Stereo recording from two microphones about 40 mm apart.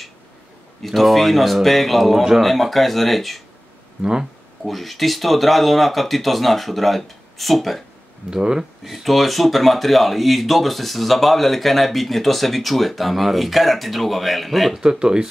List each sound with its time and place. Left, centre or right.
0.8 s speech: centre
4.0 s speech: centre
4.6 s speech: centre
8.3 s speech: centre
8.8 s speech: centre
14.8 s speech: centre